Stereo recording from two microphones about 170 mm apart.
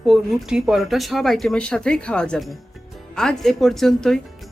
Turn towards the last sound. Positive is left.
turn(degrees=0)  # may be behind; listen again after turning